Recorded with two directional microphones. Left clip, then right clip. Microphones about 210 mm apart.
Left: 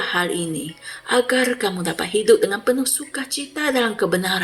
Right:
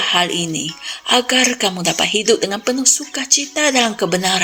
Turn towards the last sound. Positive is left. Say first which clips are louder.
# right 3 dB
turn(degrees=-40)  # may be behind; listen again after turning